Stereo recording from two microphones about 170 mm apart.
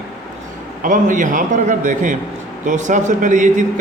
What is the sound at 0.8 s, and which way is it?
A man's voice, 50° right (ahead or behind).